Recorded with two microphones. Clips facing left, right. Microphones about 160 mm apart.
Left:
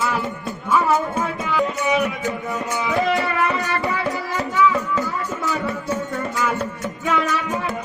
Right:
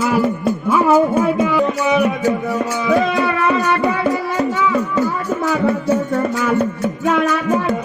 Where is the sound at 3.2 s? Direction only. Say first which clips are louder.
Right 6 dB; 75° right (ahead or behind).